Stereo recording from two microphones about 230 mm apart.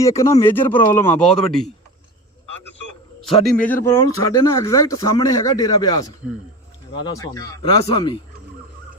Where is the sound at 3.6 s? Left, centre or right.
Centre.